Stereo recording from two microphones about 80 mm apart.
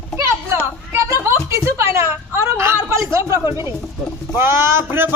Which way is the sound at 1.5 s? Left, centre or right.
Right.